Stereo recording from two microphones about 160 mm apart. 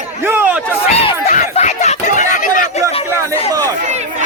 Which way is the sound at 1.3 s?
45° left (ahead or behind).